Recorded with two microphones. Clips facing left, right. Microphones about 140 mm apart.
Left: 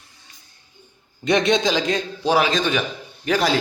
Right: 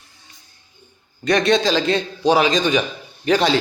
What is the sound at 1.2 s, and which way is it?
Speech, 20° left (ahead or behind).